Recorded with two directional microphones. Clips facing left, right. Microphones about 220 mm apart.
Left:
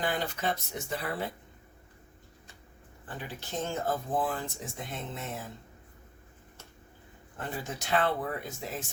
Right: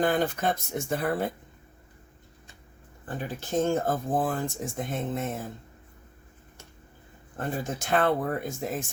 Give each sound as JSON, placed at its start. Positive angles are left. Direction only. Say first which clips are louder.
{"t": 0.0, "sound": "speech", "louder": "right 7 dB", "side_deg": -50}
{"t": 3.1, "sound": "speech", "louder": "right 8 dB", "side_deg": -50}
{"t": 7.3, "sound": "speech", "louder": "right 6 dB", "side_deg": -50}